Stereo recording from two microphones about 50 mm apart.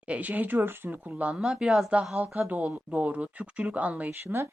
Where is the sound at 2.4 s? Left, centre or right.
Right.